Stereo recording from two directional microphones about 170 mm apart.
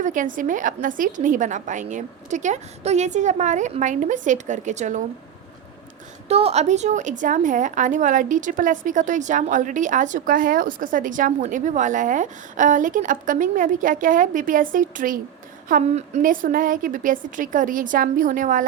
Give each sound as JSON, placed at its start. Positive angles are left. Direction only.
{"t": 0.0, "sound": "a woman's voice", "side_deg": -50}
{"t": 6.2, "sound": "a woman's voice", "side_deg": -40}